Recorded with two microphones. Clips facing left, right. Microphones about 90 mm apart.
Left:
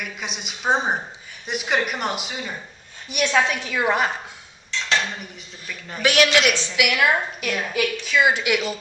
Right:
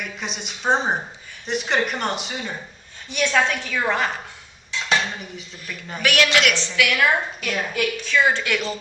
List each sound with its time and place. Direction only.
0.0 s a woman's voice: 5° left (ahead or behind)
3.1 s a woman's voice: 15° left (ahead or behind)
4.7 s dishes: 10° right (ahead or behind)
5.2 s speech: centre (ahead or behind)
6.0 s a man's voice: 20° left (ahead or behind)
7.4 s a woman's voice: 5° left (ahead or behind)